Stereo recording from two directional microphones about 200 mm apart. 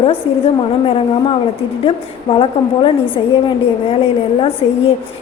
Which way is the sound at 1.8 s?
25° left (ahead or behind).